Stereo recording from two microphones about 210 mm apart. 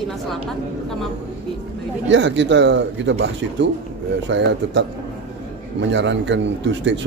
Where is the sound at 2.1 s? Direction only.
60° right (ahead or behind).